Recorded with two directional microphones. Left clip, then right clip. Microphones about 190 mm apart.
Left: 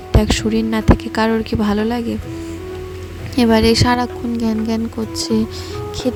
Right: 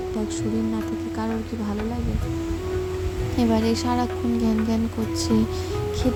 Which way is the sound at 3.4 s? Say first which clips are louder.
Left 10 dB; 35° left (ahead or behind).